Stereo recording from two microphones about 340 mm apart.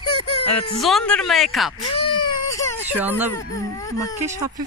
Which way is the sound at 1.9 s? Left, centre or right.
Centre.